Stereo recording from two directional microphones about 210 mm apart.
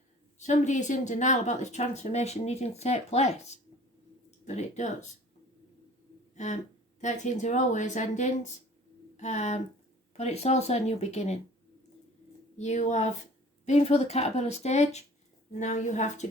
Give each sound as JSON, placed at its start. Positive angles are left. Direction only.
{"t": 0.3, "sound": "a woman's voice", "side_deg": 35}
{"t": 6.3, "sound": "a sound", "side_deg": 35}
{"t": 7.0, "sound": "a woman's voice", "side_deg": 35}
{"t": 12.5, "sound": "a woman's voice", "side_deg": 35}